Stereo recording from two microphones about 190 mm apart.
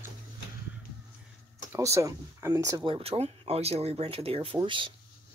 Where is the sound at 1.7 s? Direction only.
15° right (ahead or behind).